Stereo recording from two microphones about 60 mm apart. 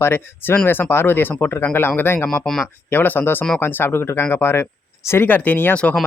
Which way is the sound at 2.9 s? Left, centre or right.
Left.